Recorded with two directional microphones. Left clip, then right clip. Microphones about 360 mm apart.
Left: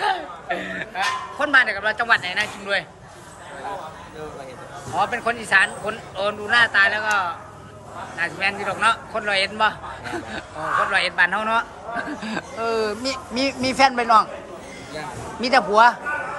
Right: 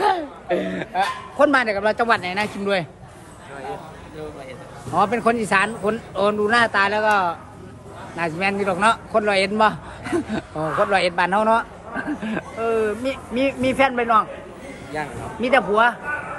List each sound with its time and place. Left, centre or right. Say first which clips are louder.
0.0 s speech: right 3 dB; centre
4.9 s speech: right 4 dB; centre
12.0 s speech: right 3 dB; centre